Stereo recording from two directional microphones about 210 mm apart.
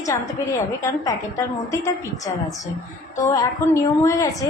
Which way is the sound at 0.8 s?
15° left (ahead or behind).